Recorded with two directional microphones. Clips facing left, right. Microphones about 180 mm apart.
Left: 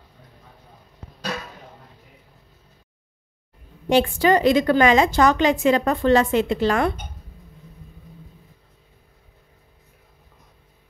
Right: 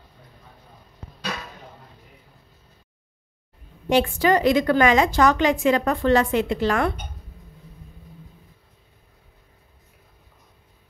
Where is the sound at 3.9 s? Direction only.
25° left (ahead or behind).